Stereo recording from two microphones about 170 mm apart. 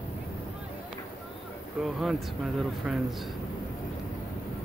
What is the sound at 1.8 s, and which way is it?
Speech, centre (ahead or behind).